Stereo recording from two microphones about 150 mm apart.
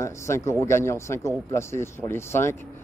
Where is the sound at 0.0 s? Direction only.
20° left (ahead or behind).